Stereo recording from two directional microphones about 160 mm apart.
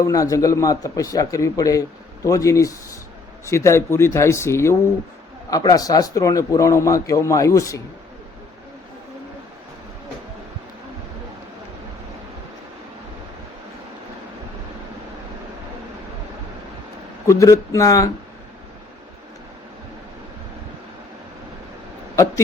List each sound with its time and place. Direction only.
0.0 s a man's voice: 20° left (ahead or behind)
17.2 s a man's voice: 20° left (ahead or behind)